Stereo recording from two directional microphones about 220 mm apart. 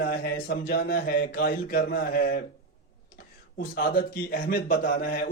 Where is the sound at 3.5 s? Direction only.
40° left (ahead or behind).